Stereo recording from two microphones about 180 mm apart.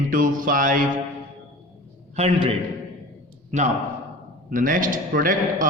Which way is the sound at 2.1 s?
35° right (ahead or behind).